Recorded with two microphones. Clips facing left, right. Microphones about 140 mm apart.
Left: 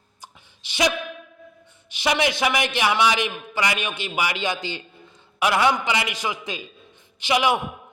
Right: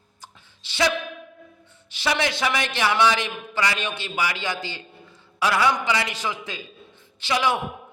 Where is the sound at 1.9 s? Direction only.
15° left (ahead or behind).